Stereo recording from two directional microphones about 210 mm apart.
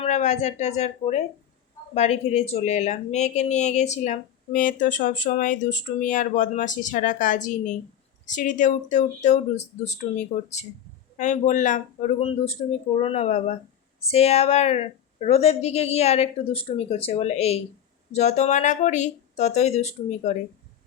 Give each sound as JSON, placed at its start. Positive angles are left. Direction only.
{"t": 0.0, "sound": "a woman's voice", "side_deg": 35}